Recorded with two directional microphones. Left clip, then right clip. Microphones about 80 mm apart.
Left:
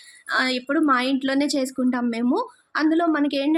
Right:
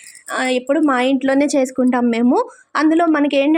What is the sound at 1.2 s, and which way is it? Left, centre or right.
Speech, right.